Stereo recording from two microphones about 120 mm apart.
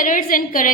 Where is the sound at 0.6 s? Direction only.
90° left.